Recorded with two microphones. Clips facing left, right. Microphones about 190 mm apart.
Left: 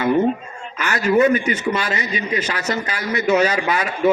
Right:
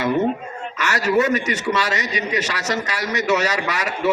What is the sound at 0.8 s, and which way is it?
A man's voice, 75° right (ahead or behind).